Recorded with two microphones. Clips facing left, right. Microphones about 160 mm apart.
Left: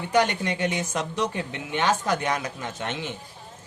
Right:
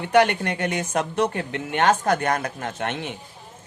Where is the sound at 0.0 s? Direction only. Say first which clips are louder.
Right 4 dB; 60° right (ahead or behind).